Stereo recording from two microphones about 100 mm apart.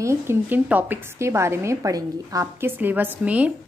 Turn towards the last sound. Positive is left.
turn(degrees=-15)  # may be behind; listen again after turning